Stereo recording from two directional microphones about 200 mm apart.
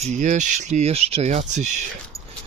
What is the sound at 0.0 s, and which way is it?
Speech, 40° right (ahead or behind).